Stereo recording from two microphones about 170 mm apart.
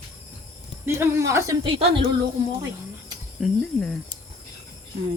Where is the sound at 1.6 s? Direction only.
30° right (ahead or behind).